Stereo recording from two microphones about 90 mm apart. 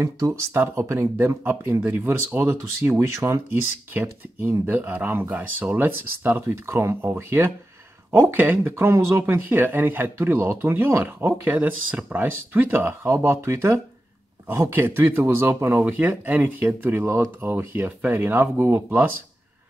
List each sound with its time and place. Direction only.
0.0 s speech: 30° right (ahead or behind)